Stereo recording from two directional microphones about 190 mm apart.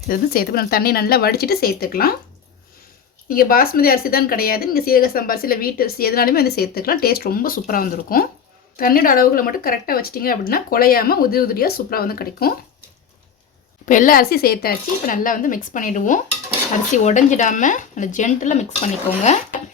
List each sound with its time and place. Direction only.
0.1 s speech: 50° left (ahead or behind)
3.2 s speech: 50° left (ahead or behind)
13.8 s speech: 45° left (ahead or behind)